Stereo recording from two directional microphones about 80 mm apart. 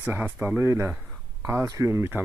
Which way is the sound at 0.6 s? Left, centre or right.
Right.